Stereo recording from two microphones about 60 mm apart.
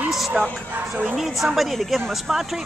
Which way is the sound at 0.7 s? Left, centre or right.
Right.